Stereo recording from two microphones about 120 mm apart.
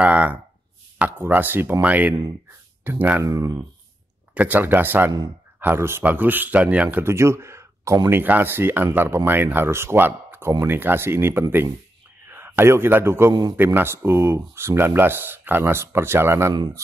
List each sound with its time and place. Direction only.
0.0 s speech: 15° right (ahead or behind)
3.3 s speech: 25° right (ahead or behind)
4.3 s a man's voice: 10° right (ahead or behind)
13.3 s a man's voice: 35° right (ahead or behind)
13.7 s speech: 20° right (ahead or behind)